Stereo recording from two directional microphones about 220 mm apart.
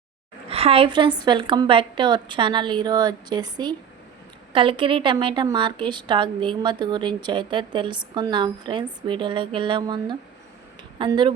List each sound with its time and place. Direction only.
0.4 s a woman's voice: 25° right (ahead or behind)